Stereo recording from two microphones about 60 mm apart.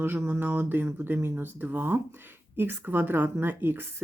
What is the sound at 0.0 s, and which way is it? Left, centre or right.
Speech, right.